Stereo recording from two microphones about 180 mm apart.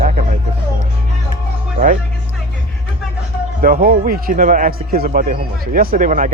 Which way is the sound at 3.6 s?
55° right (ahead or behind).